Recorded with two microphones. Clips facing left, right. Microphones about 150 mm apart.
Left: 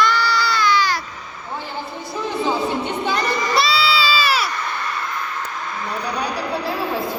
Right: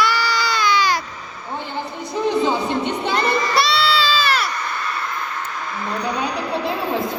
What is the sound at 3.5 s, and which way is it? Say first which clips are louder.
Goat: even; centre (ahead or behind).